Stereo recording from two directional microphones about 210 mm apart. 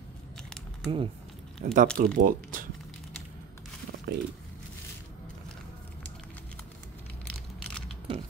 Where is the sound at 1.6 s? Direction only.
40° right (ahead or behind).